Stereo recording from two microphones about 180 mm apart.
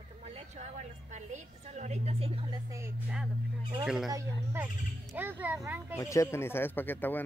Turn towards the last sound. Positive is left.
turn(degrees=10)  # may be behind; listen again after turning